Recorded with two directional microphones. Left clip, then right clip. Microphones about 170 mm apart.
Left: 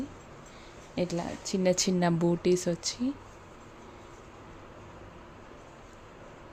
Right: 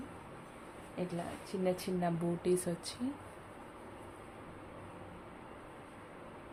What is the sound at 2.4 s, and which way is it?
Speech, 45° left (ahead or behind).